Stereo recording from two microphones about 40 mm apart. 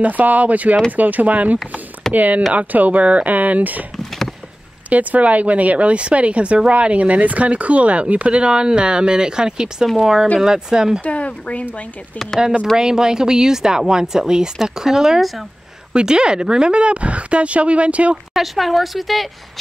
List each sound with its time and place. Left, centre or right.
0.0 s speech: right
3.9 s a sound: centre
4.8 s speech: right; by 11.0 s centre
11.1 s speech: left
12.7 s speech: centre
15.9 s a woman's voice: right
18.3 s speech: centre